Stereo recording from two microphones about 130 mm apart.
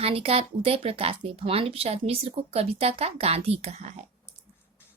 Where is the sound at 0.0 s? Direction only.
45° right (ahead or behind).